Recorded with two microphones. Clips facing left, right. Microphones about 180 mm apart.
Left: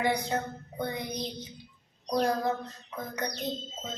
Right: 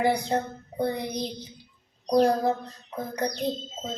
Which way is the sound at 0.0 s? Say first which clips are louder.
Right 4 dB; 30° right (ahead or behind).